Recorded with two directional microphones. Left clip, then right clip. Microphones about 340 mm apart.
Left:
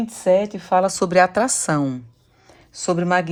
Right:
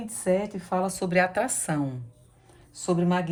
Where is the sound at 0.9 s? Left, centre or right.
Centre.